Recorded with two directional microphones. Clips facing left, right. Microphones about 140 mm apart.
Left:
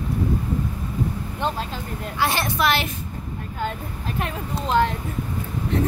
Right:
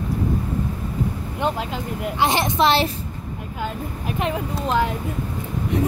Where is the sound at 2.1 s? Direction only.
20° right (ahead or behind).